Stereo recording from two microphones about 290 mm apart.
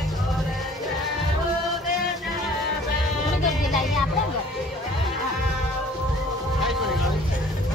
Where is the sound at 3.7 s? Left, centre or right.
Centre.